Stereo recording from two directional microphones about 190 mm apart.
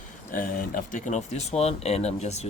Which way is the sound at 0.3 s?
45° left (ahead or behind).